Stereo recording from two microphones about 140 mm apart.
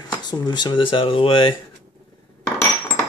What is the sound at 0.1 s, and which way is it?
Speech, 30° left (ahead or behind).